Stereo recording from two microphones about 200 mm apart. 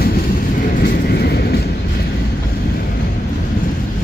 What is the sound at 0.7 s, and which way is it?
Train, 50° left (ahead or behind).